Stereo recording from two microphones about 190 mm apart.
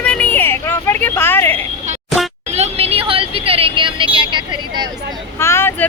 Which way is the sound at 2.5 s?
35° right (ahead or behind).